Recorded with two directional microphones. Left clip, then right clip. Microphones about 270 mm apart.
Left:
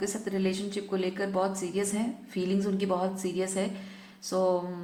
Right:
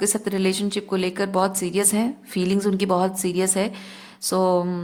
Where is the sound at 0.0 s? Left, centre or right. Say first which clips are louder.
Right 8 dB; right.